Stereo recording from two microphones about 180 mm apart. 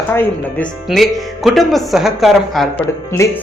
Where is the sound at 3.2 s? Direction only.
15° left (ahead or behind).